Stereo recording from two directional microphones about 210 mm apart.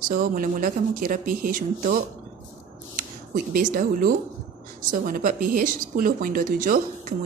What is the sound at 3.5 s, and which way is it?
A woman's voice, 45° right (ahead or behind).